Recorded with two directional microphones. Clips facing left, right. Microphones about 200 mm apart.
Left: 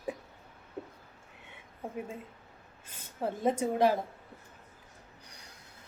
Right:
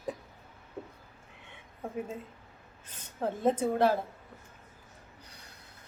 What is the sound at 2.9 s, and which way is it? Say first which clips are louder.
A woman's voice: right 1 dB; 10° left (ahead or behind).